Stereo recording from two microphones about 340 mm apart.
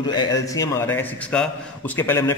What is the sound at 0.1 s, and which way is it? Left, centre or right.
A man's voice, centre.